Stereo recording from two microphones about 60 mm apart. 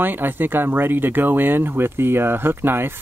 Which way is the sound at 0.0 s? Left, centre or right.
Right.